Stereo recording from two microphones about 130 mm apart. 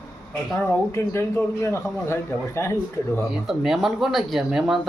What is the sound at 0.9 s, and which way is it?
A man's voice, 20° left (ahead or behind).